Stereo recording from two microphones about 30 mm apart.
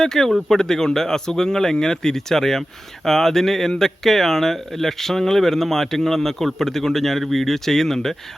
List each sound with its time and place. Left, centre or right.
0.0 s speech: centre